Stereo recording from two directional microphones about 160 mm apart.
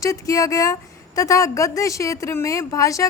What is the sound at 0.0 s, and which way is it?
A woman's voice, 20° left (ahead or behind).